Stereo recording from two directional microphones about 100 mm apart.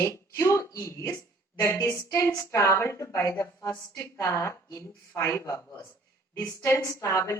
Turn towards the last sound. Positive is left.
turn(degrees=30)  # may be behind; listen again after turning